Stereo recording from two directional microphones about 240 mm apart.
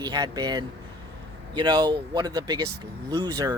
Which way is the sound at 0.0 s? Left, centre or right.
Centre.